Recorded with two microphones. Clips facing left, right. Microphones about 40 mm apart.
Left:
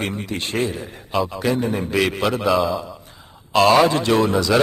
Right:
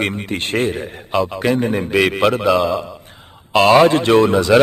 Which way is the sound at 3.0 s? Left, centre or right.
Right.